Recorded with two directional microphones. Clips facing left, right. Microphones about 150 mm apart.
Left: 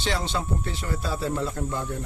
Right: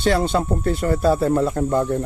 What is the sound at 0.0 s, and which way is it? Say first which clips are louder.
Speech: right 9 dB; 55° right (ahead or behind).